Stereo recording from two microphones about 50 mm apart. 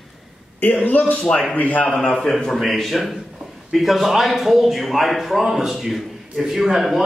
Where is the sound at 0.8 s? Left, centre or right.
Left.